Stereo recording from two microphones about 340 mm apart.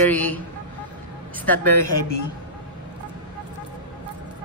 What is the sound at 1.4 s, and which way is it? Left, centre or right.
Speech, centre.